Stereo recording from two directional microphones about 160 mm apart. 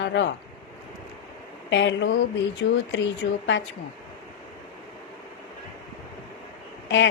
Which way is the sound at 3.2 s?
90° left.